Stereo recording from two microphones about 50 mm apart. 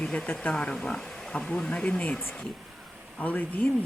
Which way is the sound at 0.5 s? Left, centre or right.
Centre.